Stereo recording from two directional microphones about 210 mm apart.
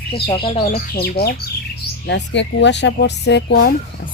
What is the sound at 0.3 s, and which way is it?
Speech, 25° left (ahead or behind).